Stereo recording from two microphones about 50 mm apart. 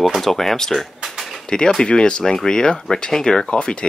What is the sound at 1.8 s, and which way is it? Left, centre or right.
Speech, centre.